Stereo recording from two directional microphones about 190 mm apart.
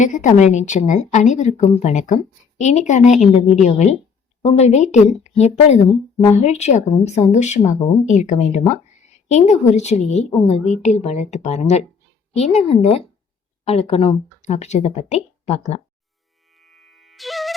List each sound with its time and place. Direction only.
0.0 s speech: 40° left (ahead or behind)
16.6 s music: centre (ahead or behind)